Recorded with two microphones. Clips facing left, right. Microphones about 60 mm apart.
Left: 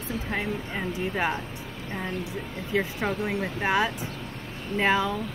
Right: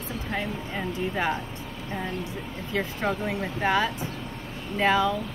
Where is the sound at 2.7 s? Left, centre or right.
Centre.